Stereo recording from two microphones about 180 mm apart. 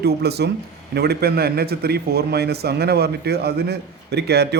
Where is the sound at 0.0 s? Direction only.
65° right (ahead or behind).